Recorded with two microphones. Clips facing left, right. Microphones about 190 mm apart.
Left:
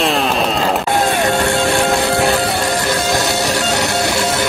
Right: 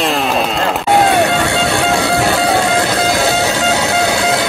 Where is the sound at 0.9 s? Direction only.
65° right (ahead or behind).